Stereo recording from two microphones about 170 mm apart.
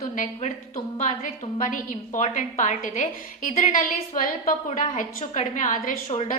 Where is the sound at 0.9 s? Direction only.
45° left (ahead or behind).